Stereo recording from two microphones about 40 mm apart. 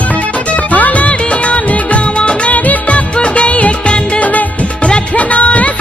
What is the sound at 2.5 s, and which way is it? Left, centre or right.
Music of bollywood, left.